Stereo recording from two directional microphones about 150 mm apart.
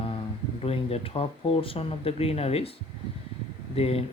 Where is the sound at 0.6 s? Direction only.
40° left (ahead or behind).